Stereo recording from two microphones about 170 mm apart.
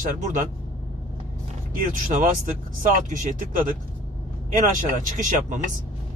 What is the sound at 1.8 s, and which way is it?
Speech, 50° right (ahead or behind).